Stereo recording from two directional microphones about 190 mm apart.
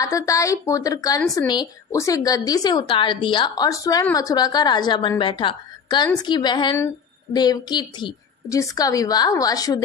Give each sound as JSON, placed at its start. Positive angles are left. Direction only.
{"t": 0.0, "sound": "speech", "side_deg": 15}